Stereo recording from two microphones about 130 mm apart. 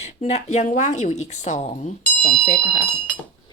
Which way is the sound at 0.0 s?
55° left (ahead or behind).